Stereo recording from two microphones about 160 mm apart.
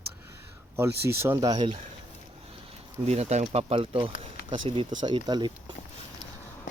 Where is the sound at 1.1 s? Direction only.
15° right (ahead or behind).